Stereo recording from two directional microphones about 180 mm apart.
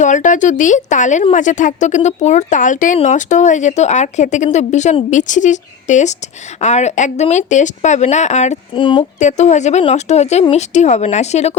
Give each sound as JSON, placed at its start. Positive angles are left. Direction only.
{"t": 0.0, "sound": "a woman's voice", "side_deg": 45}
{"t": 9.1, "sound": "speech", "side_deg": 40}